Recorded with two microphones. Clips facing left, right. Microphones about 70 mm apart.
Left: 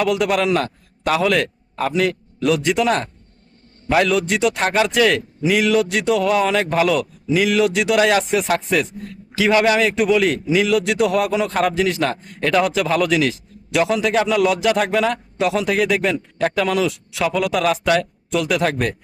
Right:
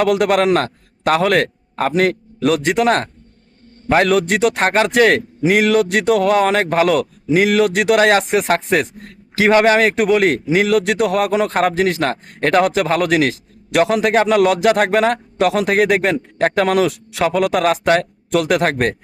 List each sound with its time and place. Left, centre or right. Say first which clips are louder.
0.0 s a man's voice: right 4 dB; right